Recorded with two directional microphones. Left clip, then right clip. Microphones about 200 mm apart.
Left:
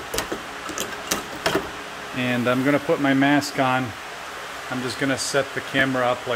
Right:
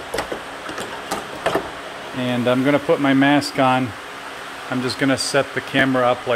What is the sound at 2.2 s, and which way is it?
Speech, 5° right (ahead or behind).